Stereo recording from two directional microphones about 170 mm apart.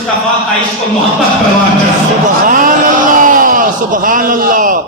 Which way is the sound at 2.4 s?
55° right (ahead or behind).